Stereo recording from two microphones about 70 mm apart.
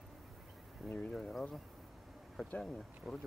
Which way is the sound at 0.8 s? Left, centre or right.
Centre.